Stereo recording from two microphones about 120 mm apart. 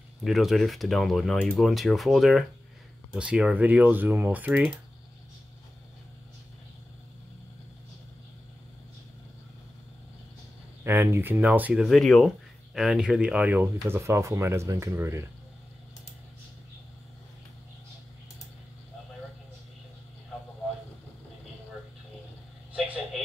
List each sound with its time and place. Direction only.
0.2 s speech: centre (ahead or behind)
10.8 s speech: 15° right (ahead or behind)
11.8 s speech: centre (ahead or behind); by 15.2 s 25° right (ahead or behind)
22.7 s vehicle: 10° right (ahead or behind)